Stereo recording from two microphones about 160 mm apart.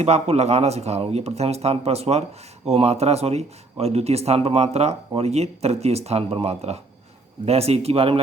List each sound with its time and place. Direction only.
0.0 s speech: 40° right (ahead or behind)